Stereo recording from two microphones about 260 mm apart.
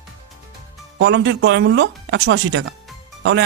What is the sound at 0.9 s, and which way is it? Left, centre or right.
Speech, right.